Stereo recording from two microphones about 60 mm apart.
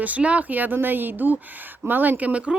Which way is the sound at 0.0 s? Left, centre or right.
Right.